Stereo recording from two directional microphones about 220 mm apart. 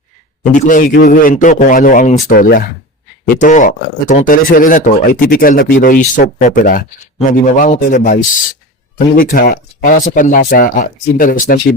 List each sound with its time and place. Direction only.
0.5 s speech: 35° left (ahead or behind)